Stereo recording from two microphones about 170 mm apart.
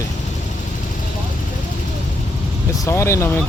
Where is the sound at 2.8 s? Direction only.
15° left (ahead or behind).